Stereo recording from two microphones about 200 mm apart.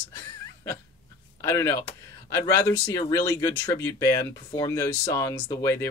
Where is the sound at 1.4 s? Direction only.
15° left (ahead or behind).